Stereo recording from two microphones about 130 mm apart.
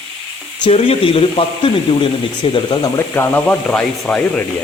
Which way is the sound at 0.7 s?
55° left (ahead or behind).